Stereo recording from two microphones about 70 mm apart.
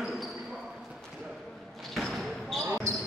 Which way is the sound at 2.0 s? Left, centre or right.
Centre.